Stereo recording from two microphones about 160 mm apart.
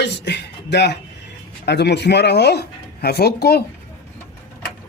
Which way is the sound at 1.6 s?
90° left.